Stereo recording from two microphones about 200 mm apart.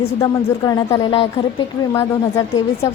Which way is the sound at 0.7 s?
20° left (ahead or behind).